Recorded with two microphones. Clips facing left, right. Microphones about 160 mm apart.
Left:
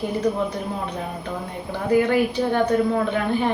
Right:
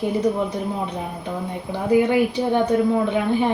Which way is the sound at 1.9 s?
15° right (ahead or behind).